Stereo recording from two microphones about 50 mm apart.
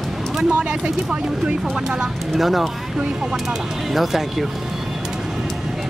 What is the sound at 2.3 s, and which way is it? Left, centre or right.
Speech, centre.